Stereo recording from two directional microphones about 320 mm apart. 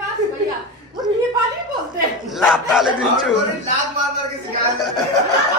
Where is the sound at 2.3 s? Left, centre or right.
Centre.